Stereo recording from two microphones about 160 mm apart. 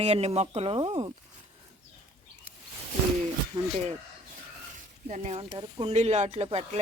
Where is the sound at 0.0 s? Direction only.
40° right (ahead or behind).